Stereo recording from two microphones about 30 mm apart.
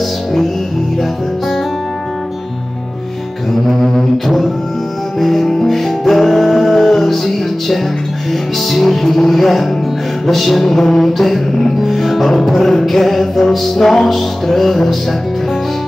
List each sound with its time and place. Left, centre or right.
3.9 s music: centre
10.8 s music: centre
11.1 s music: centre